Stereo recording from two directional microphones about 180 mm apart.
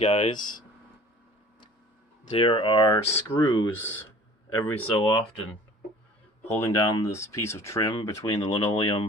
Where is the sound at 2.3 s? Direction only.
30° left (ahead or behind).